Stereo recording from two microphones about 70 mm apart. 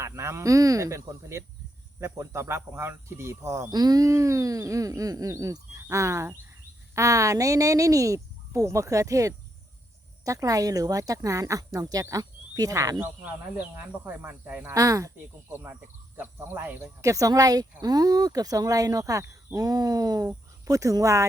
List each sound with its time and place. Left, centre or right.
0.0 s speech: right
3.7 s speech: right
13.6 s speech: right
14.7 s speech: right
16.1 s speech: right
16.8 s speech: right